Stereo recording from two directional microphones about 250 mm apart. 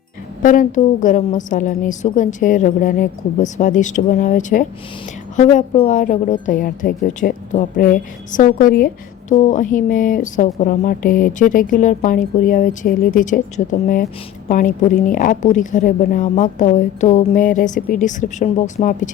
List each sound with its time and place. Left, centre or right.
0.4 s speech: left